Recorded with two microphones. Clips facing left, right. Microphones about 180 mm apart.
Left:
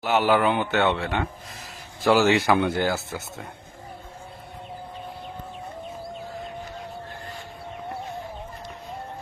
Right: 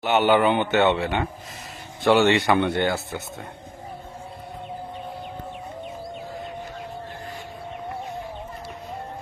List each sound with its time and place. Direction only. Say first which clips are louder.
0.0 s speech: right 2 dB; centre (ahead or behind)